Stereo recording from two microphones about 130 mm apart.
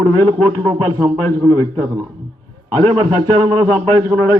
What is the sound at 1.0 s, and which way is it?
A man's voice, 25° right (ahead or behind).